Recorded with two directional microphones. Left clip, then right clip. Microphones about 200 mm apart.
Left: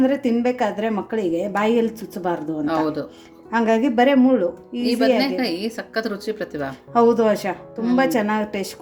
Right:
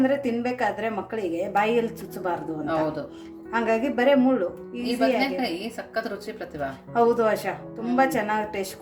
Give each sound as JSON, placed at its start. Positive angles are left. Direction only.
{"t": 0.1, "sound": "a woman's voice", "side_deg": 40}